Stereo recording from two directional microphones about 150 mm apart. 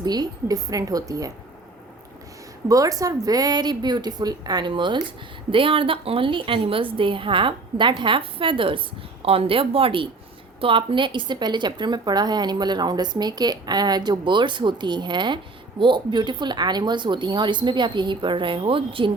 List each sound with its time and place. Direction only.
0.0 s speech: 25° right (ahead or behind)
2.6 s a woman's voice: 20° right (ahead or behind)